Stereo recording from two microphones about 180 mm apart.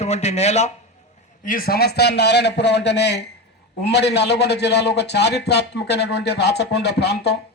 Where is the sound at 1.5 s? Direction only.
55° left (ahead or behind).